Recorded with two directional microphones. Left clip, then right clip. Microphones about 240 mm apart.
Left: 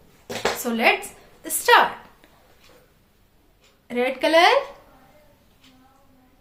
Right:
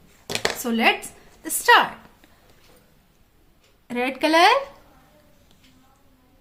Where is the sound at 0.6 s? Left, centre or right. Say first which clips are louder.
Left 1 dB; centre.